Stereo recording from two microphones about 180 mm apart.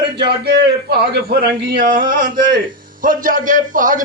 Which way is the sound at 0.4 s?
65° right (ahead or behind).